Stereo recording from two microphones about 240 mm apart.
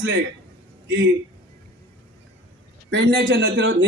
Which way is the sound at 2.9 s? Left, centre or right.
Right.